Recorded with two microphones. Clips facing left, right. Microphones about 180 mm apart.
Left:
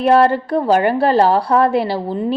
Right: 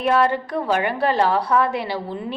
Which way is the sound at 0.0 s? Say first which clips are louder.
Left 6 dB; 35° left (ahead or behind).